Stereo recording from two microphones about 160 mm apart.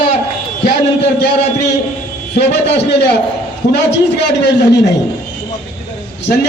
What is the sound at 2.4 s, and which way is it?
A man's voice, 90° left.